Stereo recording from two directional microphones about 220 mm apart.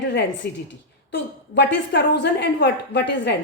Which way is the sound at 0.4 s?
45° left (ahead or behind).